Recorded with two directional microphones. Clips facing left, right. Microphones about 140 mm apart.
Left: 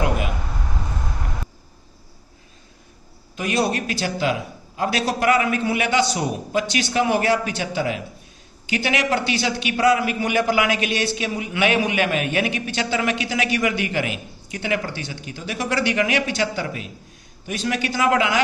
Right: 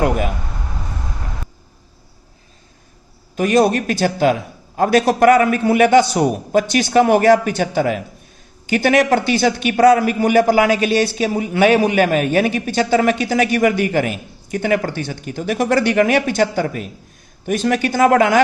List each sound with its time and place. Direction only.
3.3 s speech: 45° right (ahead or behind)